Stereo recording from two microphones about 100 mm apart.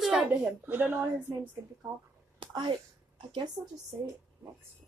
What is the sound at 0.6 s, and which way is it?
Speech, 20° right (ahead or behind).